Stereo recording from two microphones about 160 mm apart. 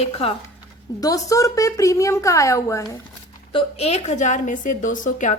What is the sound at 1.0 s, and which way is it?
A woman's voice, 20° left (ahead or behind).